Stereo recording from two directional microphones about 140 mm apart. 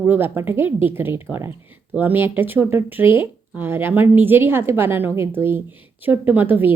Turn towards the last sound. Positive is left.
turn(degrees=-15)  # may be behind; listen again after turning